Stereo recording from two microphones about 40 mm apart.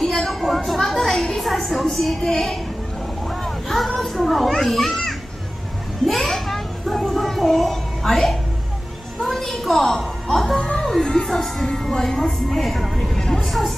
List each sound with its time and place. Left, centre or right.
0.3 s a sound: centre
2.2 s a woman's voice: centre
3.3 s children playing: centre
6.0 s a sound: centre
9.2 s music: centre
11.2 s a woman's voice: centre